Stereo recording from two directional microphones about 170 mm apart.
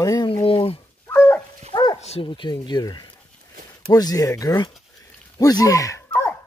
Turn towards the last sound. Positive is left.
turn(degrees=20)  # may be behind; listen again after turning